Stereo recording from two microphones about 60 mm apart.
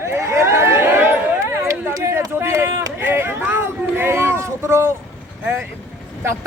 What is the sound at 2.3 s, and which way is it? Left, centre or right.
Run, right.